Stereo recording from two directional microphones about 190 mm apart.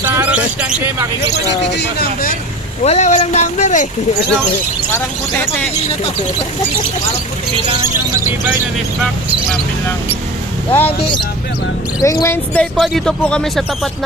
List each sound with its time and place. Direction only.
0.0 s a sound: 10° right (ahead or behind)
1.7 s speech: 55° left (ahead or behind)
2.8 s speech: 35° left (ahead or behind)
4.9 s speech: 10° left (ahead or behind)
7.9 s speech: 15° right (ahead or behind)
10.7 s speech: 10° left (ahead or behind)
12.0 s speech: 15° left (ahead or behind)